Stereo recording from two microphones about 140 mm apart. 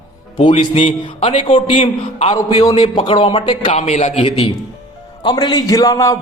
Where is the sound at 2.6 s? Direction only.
35° left (ahead or behind).